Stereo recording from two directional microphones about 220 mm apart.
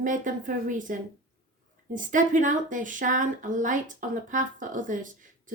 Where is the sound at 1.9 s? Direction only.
35° right (ahead or behind).